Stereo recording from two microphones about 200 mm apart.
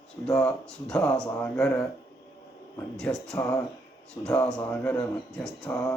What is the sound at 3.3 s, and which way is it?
Speech, 15° left (ahead or behind).